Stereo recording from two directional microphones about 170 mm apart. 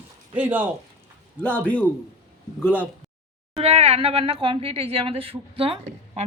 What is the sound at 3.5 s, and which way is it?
Speech, 35° right (ahead or behind).